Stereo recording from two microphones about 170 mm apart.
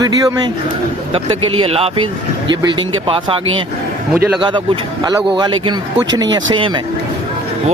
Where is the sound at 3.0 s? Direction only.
30° right (ahead or behind).